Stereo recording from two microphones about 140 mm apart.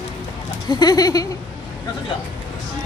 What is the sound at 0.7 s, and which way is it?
Speech, 30° left (ahead or behind).